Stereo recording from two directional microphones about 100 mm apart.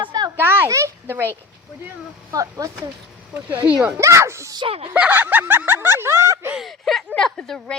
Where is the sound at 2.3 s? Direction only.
35° right (ahead or behind).